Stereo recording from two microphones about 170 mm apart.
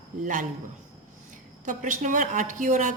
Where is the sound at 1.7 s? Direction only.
50° right (ahead or behind).